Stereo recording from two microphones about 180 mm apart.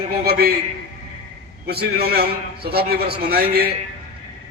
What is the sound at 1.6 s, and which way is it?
A man's voice, 60° right (ahead or behind).